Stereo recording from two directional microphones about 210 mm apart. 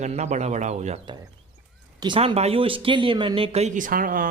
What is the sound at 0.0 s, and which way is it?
Speech, 30° right (ahead or behind).